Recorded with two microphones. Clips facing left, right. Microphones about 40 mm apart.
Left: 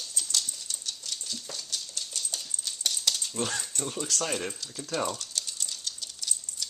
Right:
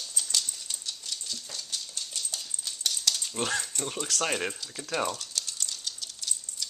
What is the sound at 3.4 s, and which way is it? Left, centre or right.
Speech, centre.